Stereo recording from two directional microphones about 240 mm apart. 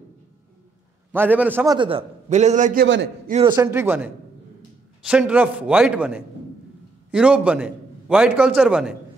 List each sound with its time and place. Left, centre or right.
1.1 s a man's voice: centre
1.8 s a man's voice: right
3.4 s a man's voice: centre